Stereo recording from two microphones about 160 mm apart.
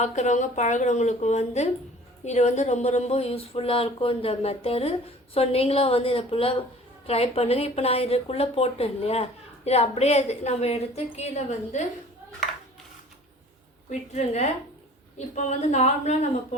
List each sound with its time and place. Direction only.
0.0 s a woman's voice: 50° left (ahead or behind)
14.1 s a woman's voice: 45° left (ahead or behind)